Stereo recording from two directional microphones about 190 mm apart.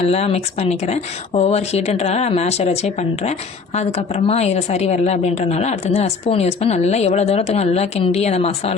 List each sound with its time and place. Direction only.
0.0 s a woman's voice: 35° left (ahead or behind)